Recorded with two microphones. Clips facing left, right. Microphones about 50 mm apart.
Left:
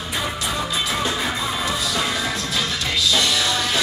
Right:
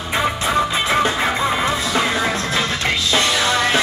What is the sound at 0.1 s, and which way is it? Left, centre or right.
Music, right.